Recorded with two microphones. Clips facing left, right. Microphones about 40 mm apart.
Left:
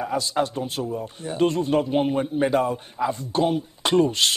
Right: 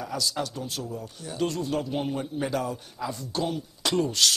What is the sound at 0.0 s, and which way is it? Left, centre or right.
A man's voice, left.